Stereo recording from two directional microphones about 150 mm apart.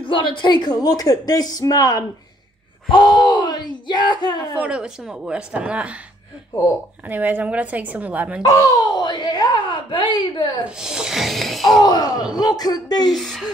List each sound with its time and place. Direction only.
0.0 s speech: 35° left (ahead or behind)
4.6 s speech: 5° right (ahead or behind)
7.1 s speech: 10° right (ahead or behind)
8.4 s speech: 20° left (ahead or behind)
10.8 s music: 5° right (ahead or behind)
11.7 s speech: 25° left (ahead or behind)
13.1 s a woman's voice: centre (ahead or behind)